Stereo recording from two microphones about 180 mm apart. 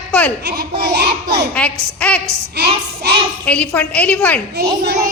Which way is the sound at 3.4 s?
5° left (ahead or behind).